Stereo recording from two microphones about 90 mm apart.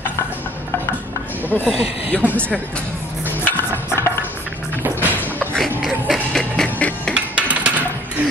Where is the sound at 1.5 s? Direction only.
15° left (ahead or behind).